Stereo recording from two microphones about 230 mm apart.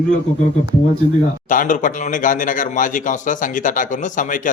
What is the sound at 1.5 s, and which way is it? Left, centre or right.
A man's voice, left.